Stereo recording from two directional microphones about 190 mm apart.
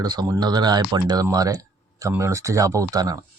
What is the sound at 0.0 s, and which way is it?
Speech, 20° right (ahead or behind).